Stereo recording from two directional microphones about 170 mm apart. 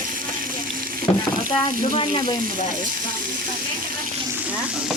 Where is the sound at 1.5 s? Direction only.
30° left (ahead or behind).